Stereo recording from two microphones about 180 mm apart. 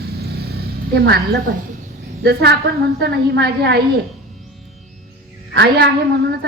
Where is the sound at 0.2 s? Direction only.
60° right (ahead or behind).